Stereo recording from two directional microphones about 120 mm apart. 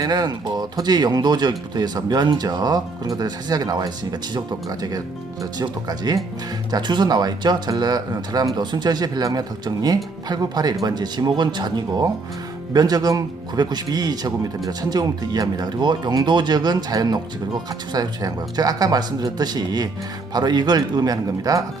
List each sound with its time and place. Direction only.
0.0 s speech: 35° right (ahead or behind)